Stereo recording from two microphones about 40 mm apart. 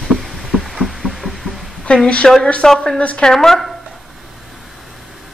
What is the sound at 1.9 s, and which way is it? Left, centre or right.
Speech, left.